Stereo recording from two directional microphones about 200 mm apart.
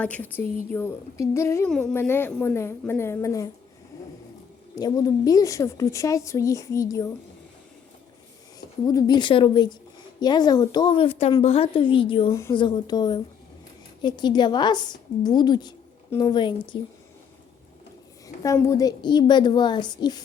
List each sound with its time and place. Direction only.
0.0 s a woman's voice: 10° left (ahead or behind)
4.7 s a woman's voice: 20° left (ahead or behind)
8.9 s a woman's voice: 20° left (ahead or behind)
18.4 s a woman's voice: 15° left (ahead or behind)